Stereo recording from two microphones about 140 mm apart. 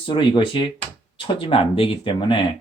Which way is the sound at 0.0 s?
35° left (ahead or behind).